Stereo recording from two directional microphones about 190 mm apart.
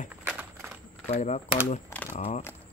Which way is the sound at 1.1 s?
35° left (ahead or behind).